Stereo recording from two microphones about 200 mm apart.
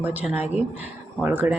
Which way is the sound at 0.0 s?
10° right (ahead or behind).